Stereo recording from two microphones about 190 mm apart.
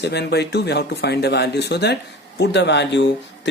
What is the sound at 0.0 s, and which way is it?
Speech, 60° left (ahead or behind).